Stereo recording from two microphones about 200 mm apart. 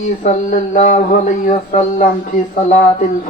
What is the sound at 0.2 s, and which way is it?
Speech, 40° left (ahead or behind).